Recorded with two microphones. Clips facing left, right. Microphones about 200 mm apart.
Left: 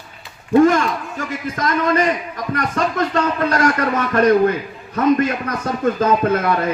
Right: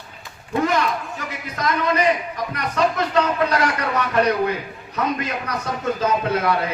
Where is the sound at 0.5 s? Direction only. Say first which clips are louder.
Left 8 dB; 45° left (ahead or behind).